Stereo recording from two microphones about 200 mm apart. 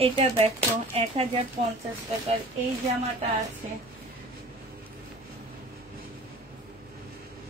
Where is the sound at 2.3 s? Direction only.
30° right (ahead or behind).